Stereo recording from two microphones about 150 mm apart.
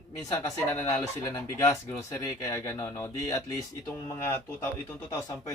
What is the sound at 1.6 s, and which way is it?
Speech, 20° left (ahead or behind).